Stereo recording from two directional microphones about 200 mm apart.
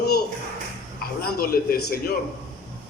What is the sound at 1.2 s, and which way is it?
Speech, 50° left (ahead or behind).